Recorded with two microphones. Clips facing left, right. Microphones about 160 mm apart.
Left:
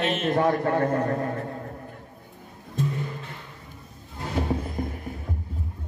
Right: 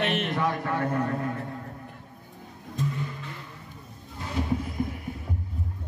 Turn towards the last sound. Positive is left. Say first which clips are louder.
# right 1 dB
turn(degrees=45)  # may be behind; listen again after turning